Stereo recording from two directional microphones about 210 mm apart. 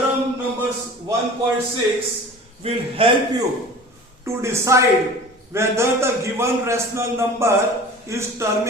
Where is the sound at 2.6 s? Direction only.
25° right (ahead or behind).